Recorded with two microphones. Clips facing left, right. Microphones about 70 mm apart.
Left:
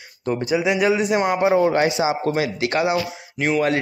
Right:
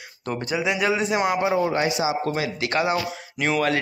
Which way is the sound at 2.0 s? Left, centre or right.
Left.